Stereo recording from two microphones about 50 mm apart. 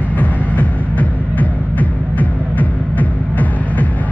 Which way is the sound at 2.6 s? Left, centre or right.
Left.